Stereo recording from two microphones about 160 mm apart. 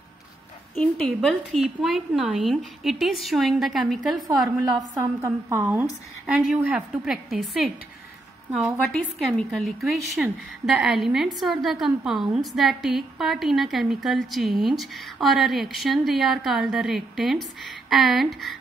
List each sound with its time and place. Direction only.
0.7 s a woman's voice: 5° left (ahead or behind)
4.7 s a woman's voice: 20° right (ahead or behind); by 7.7 s centre (ahead or behind)
8.9 s a woman's voice: 5° left (ahead or behind)